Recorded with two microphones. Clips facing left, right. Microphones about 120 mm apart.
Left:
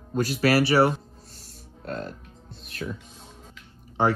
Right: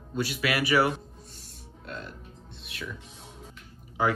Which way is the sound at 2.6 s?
40° left (ahead or behind).